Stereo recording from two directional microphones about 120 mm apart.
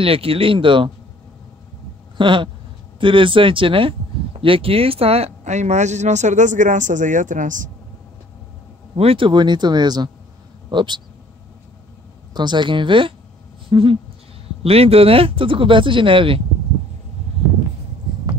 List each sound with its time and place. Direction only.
0.0 s speech: 50° right (ahead or behind)
2.1 s speech: 45° right (ahead or behind); by 7.7 s 90° right
8.9 s speech: 50° right (ahead or behind)
12.4 s speech: 40° right (ahead or behind)